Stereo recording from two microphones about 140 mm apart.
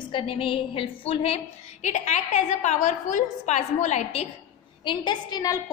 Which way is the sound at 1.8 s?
55° left (ahead or behind).